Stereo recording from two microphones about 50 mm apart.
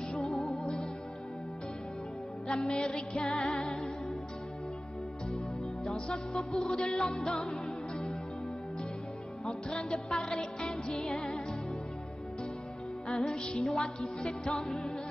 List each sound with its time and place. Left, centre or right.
0.1 s music: centre
2.4 s music: centre
3.3 s music: centre
5.9 s music: centre
6.5 s music: centre
6.9 s music: centre
7.3 s music: centre
10.0 s music: centre
13.1 s music: centre